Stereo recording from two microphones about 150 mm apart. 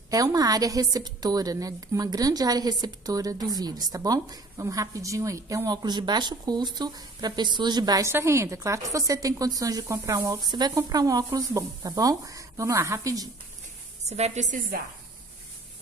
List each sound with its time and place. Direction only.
0.1 s a woman's voice: 25° right (ahead or behind)
14.0 s a woman's voice: 45° right (ahead or behind)